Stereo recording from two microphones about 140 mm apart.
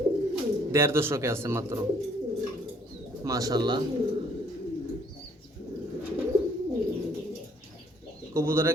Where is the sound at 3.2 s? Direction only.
25° right (ahead or behind).